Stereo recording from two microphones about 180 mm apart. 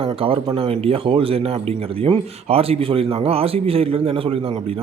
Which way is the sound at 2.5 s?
35° right (ahead or behind).